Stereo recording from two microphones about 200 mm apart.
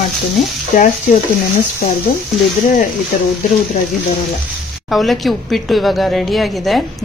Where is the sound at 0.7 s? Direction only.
40° left (ahead or behind).